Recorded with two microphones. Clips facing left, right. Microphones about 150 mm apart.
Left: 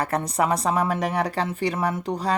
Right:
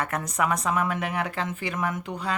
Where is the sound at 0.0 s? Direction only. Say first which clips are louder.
Left 4 dB; 35° left (ahead or behind).